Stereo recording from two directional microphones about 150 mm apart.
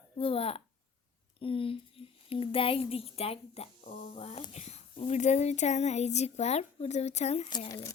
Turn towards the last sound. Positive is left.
turn(degrees=25)  # may be behind; listen again after turning